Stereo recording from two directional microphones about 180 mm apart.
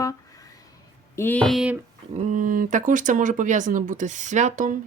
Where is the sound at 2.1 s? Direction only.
40° right (ahead or behind).